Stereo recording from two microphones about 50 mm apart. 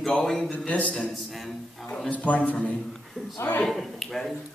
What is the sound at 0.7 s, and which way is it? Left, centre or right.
Speech, left.